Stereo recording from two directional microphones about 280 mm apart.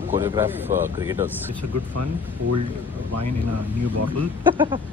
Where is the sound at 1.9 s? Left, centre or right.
Right.